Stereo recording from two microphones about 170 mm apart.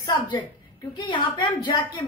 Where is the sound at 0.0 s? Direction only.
25° left (ahead or behind).